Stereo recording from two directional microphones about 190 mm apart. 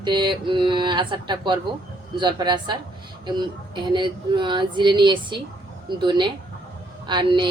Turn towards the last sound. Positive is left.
turn(degrees=-25)  # may be behind; listen again after turning